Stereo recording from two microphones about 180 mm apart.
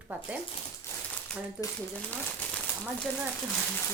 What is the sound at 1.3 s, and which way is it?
Speech, 5° left (ahead or behind).